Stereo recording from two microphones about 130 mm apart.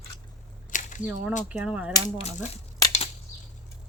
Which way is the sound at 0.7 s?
75° left (ahead or behind).